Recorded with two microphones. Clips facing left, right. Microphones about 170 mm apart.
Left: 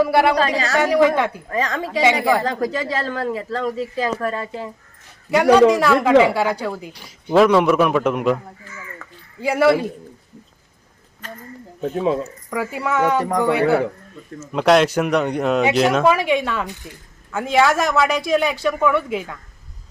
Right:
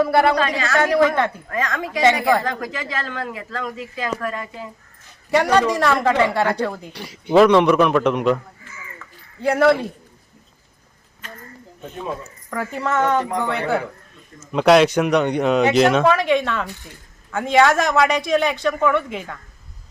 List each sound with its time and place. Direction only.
0.0 s speech: 10° left (ahead or behind)
0.3 s speech: 35° left (ahead or behind)
0.8 s speech: 10° left (ahead or behind)
1.5 s speech: 30° left (ahead or behind)
5.3 s speech: 5° left (ahead or behind)
6.9 s speech: 70° right (ahead or behind)
7.3 s speech: 5° left (ahead or behind)
9.0 s a sound: 45° left (ahead or behind)
9.4 s speech: 5° left (ahead or behind)
11.8 s speech: 80° left
12.5 s speech: 10° left (ahead or behind)
14.5 s speech: centre (ahead or behind)